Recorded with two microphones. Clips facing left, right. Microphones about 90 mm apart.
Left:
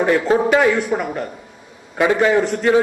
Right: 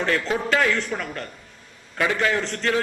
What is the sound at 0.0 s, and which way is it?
A man's voice, 15° left (ahead or behind).